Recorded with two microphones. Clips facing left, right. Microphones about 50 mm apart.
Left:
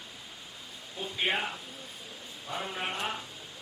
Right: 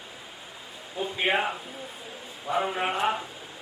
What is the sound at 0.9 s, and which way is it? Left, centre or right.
A man's voice, centre.